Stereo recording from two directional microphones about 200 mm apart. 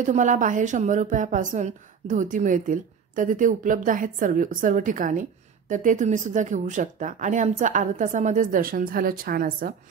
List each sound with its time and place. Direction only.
0.0 s speech: 40° right (ahead or behind)